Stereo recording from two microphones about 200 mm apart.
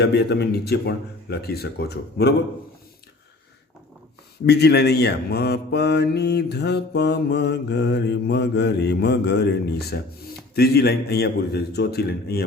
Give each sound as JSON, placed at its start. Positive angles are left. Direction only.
{"t": 0.0, "sound": "speech", "side_deg": 55}
{"t": 4.4, "sound": "mantra", "side_deg": 55}
{"t": 10.5, "sound": "speech", "side_deg": 50}